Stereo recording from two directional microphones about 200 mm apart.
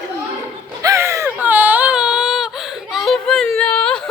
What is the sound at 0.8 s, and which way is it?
Baby cry, 15° right (ahead or behind).